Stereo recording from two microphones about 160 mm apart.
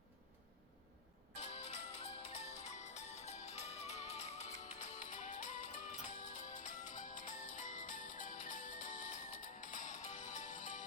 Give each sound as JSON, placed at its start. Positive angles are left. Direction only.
{"t": 1.4, "sound": "music", "side_deg": 45}